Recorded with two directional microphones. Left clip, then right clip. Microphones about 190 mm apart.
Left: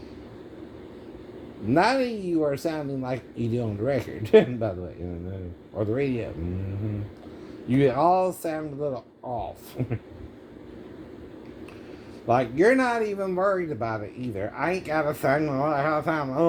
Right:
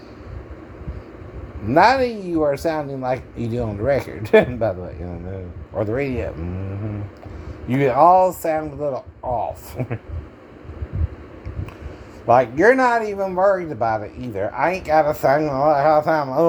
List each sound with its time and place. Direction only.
1.7 s speech: 20° right (ahead or behind)
5.7 s speech: 20° right (ahead or behind)
7.7 s speech: 15° right (ahead or behind)
12.2 s speech: 15° right (ahead or behind)